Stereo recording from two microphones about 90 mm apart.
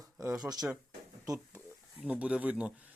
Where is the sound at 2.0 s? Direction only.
15° right (ahead or behind).